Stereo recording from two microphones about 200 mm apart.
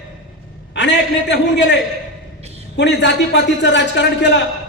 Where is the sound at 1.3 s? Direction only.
60° left (ahead or behind).